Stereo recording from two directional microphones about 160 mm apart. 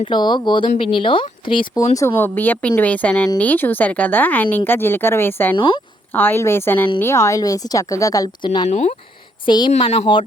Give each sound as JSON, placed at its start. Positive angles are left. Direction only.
{"t": 0.0, "sound": "speech", "side_deg": 30}
{"t": 2.0, "sound": "speech", "side_deg": 15}
{"t": 5.5, "sound": "speech", "side_deg": 30}
{"t": 6.1, "sound": "a woman's voice", "side_deg": 15}
{"t": 8.7, "sound": "speech", "side_deg": 50}
{"t": 9.5, "sound": "a woman's voice", "side_deg": 30}
{"t": 9.7, "sound": "speech", "side_deg": 45}